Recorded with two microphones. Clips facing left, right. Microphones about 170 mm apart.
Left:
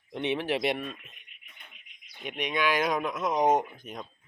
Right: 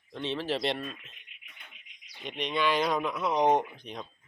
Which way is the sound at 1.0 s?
50° left (ahead or behind).